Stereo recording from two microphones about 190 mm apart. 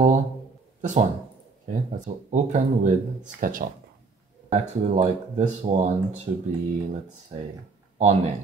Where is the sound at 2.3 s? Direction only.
40° right (ahead or behind).